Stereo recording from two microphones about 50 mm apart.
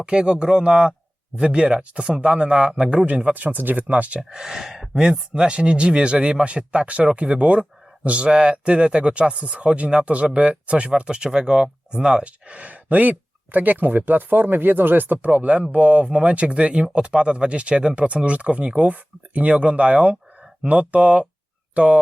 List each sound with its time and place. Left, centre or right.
0.0 s speech: right
4.2 s speech: centre; by 22.0 s right